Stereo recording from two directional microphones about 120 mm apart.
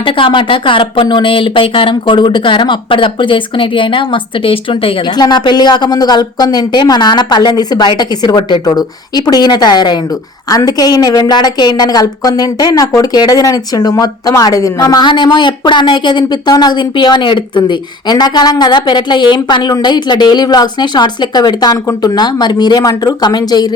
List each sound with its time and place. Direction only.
0.0 s speech: 45° left (ahead or behind)
5.1 s a woman's voice: 35° left (ahead or behind)